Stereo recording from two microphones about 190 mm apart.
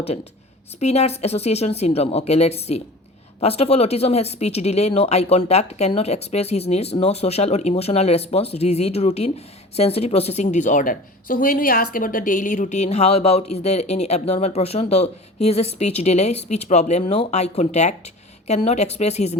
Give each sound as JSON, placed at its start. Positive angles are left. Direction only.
{"t": 0.8, "sound": "a woman's voice", "side_deg": 35}